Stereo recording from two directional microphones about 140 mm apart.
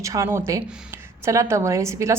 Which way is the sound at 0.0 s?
20° right (ahead or behind).